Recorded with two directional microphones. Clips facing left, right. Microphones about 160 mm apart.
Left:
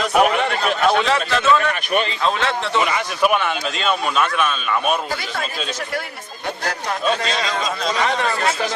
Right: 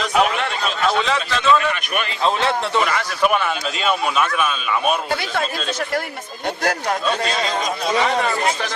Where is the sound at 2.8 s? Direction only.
10° left (ahead or behind).